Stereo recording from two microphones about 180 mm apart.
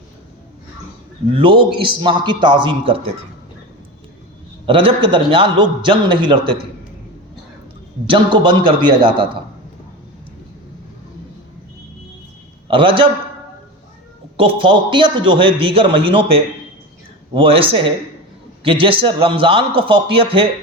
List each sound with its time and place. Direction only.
1.3 s a man's voice: 30° right (ahead or behind)
4.6 s a man's voice: 30° right (ahead or behind)
8.0 s a man's voice: 25° right (ahead or behind)
12.6 s a man's voice: 30° right (ahead or behind)
14.3 s a man's voice: 30° right (ahead or behind)